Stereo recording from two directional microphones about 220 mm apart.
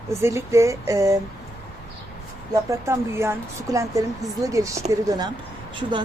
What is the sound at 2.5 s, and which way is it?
Speech, 15° right (ahead or behind).